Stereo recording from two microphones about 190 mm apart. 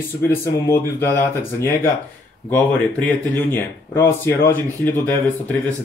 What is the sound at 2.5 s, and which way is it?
Speech, 10° left (ahead or behind).